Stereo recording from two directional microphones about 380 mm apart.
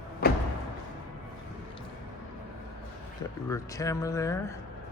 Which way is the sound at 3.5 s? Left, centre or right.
Centre.